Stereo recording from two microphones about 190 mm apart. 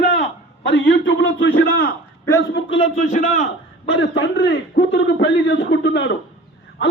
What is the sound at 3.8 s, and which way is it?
A man's voice, 70° left (ahead or behind).